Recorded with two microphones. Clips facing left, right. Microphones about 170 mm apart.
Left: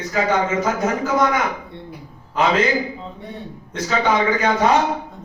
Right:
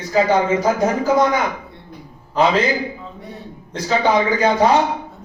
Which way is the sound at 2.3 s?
30° right (ahead or behind).